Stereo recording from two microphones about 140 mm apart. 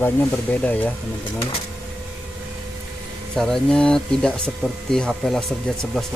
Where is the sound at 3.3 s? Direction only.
5° left (ahead or behind).